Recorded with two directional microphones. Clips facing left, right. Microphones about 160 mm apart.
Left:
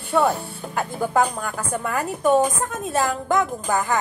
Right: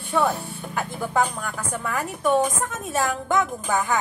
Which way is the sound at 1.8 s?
35° left (ahead or behind).